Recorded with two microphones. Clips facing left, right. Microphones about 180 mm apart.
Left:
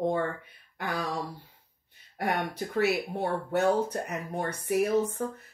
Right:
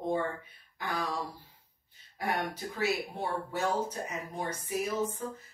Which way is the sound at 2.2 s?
60° left (ahead or behind).